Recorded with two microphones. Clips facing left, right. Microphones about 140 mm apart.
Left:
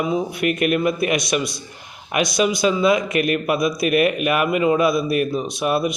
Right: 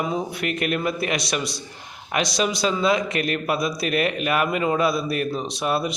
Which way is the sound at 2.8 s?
30° right (ahead or behind).